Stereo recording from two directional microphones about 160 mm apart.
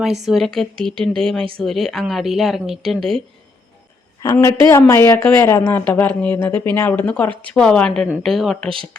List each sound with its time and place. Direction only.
0.3 s a woman's voice: centre (ahead or behind)
4.2 s a woman's voice: 20° left (ahead or behind); by 8.7 s centre (ahead or behind)